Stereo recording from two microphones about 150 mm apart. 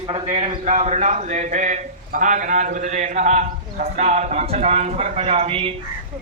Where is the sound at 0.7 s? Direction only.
50° right (ahead or behind).